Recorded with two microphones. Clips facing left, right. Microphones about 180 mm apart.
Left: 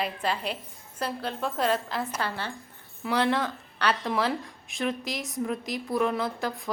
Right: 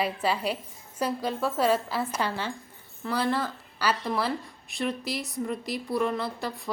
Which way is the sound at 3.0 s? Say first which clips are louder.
Left 2 dB; centre (ahead or behind).